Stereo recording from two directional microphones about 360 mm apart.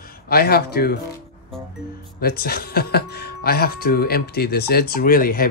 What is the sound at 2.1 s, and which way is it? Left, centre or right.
Speech, left.